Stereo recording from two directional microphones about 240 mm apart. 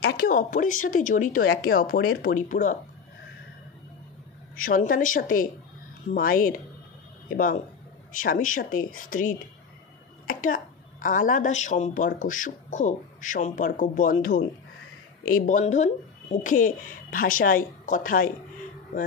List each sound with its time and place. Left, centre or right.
0.0 s a woman's voice: left
4.6 s a woman's voice: left